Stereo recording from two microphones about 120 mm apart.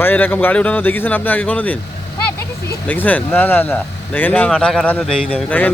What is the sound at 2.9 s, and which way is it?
Speech, 15° left (ahead or behind).